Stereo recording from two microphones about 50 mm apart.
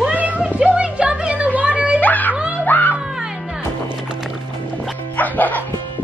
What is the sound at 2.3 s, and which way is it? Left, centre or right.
Music, right.